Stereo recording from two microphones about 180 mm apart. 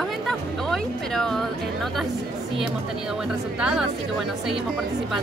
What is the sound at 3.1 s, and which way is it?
Speech, 5° right (ahead or behind).